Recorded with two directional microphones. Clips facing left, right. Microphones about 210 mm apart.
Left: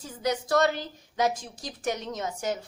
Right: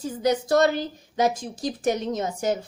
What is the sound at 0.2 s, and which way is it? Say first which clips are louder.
A woman's voice: right 4 dB; 35° right (ahead or behind).